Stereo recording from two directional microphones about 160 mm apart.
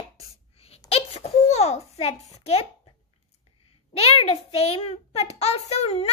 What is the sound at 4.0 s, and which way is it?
A child's voice, 40° left (ahead or behind).